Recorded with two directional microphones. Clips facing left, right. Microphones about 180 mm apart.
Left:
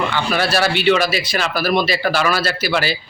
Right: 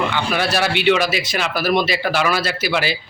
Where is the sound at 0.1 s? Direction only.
15° right (ahead or behind).